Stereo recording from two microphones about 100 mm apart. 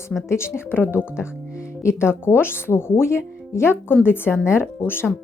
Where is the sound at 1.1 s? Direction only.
25° left (ahead or behind).